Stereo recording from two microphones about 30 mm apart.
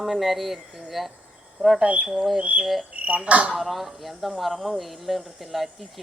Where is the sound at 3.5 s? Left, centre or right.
Centre.